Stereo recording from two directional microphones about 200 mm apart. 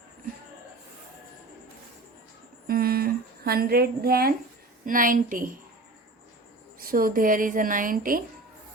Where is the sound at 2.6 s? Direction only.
50° right (ahead or behind).